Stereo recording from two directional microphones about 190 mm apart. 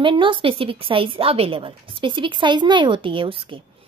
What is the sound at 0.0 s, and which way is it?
A woman's voice, 25° right (ahead or behind).